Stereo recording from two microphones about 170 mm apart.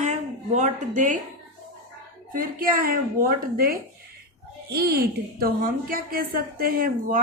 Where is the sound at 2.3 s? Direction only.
55° right (ahead or behind).